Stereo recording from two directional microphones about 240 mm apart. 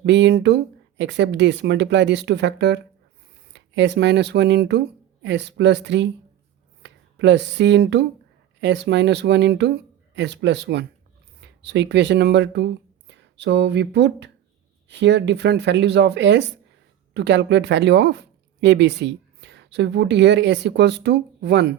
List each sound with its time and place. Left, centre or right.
0.0 s speech: right